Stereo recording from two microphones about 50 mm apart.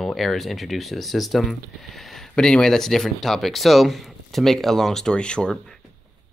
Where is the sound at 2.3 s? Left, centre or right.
Centre.